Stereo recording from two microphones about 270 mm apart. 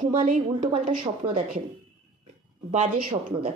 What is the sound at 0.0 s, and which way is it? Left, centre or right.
Speech, right.